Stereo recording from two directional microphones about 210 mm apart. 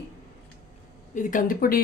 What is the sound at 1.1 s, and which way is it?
Speech, 35° left (ahead or behind).